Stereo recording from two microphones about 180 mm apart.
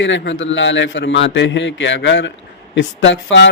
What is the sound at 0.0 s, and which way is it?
A man's voice, 90° left.